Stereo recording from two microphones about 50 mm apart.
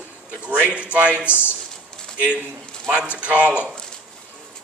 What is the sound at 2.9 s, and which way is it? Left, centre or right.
Speech, right.